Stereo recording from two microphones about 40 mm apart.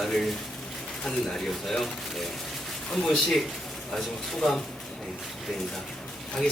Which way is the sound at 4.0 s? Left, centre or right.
Centre.